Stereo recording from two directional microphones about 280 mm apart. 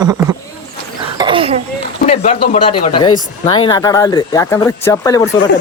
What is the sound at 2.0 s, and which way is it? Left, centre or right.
Speech, left.